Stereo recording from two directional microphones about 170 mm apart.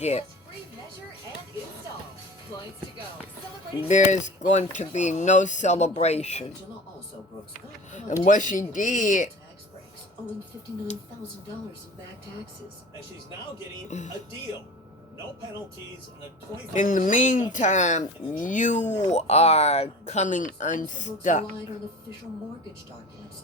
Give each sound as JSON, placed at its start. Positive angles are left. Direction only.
{"t": 0.0, "sound": "speech", "side_deg": 40}
{"t": 3.8, "sound": "speech", "side_deg": 45}
{"t": 8.2, "sound": "speech", "side_deg": 50}
{"t": 13.8, "sound": "speech", "side_deg": 45}
{"t": 16.7, "sound": "speech", "side_deg": 50}